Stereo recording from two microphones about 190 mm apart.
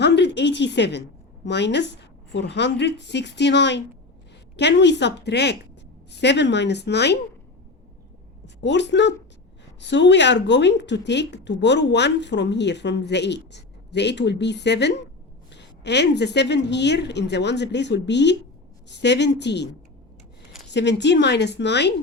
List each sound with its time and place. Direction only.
0.0 s a woman's voice: 65° left (ahead or behind)
8.6 s a woman's voice: 65° left (ahead or behind)